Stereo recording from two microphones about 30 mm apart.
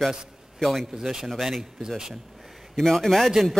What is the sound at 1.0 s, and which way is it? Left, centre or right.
Speech, centre.